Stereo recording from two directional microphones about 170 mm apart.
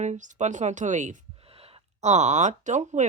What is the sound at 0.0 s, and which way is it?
Speech, 45° right (ahead or behind).